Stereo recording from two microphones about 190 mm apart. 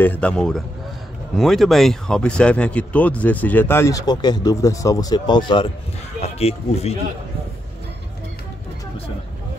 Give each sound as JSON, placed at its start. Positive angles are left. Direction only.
{"t": 0.0, "sound": "speech", "side_deg": 10}